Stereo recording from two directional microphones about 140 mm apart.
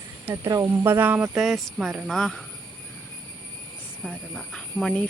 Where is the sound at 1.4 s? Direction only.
Centre (ahead or behind).